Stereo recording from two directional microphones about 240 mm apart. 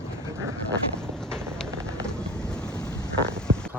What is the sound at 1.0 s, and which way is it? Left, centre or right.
Vehicle, centre.